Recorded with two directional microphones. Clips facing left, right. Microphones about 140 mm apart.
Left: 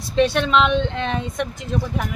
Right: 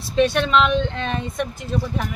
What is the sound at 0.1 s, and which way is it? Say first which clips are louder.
Speech: even; 15° right (ahead or behind).